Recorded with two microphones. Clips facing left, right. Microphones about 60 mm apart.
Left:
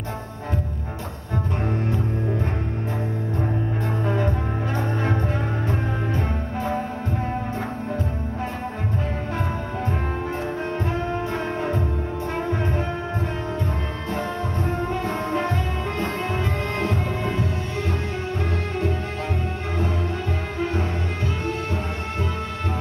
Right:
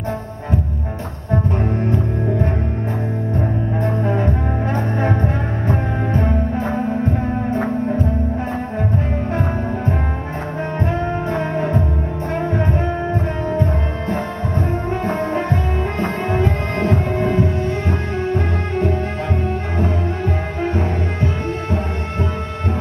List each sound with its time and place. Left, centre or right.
3.3 s music: right
5.7 s music: right
10.9 s brass instrument: right
12.4 s music: right